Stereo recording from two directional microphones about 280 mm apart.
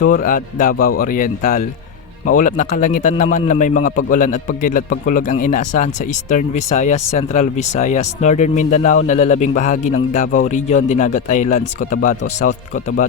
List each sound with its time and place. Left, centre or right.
0.0 s speech: left